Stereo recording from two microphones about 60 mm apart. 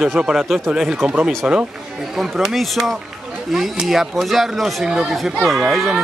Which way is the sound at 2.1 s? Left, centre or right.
Centre.